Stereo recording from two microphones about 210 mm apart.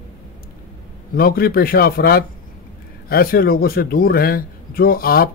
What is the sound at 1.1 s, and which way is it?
Speech, 45° left (ahead or behind).